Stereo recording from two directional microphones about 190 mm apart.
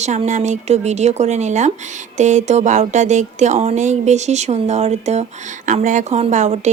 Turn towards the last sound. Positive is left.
turn(degrees=-40)  # may be behind; listen again after turning